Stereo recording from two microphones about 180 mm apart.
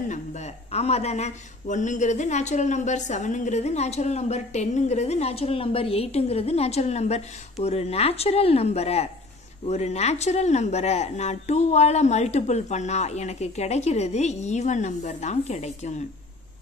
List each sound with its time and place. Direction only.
0.7 s speech: 35° left (ahead or behind)